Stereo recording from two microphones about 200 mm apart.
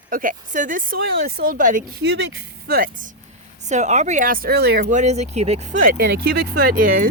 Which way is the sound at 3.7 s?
35° right (ahead or behind).